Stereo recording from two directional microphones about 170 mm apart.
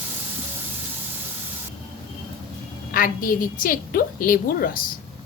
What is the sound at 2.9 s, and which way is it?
A woman's voice, 55° left (ahead or behind).